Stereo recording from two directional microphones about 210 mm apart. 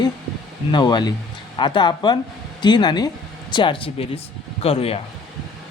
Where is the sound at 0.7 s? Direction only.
20° left (ahead or behind).